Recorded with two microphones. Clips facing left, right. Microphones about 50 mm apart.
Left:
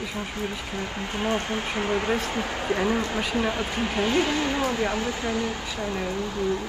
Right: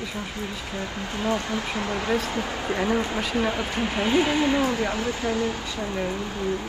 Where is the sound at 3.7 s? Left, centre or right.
Centre.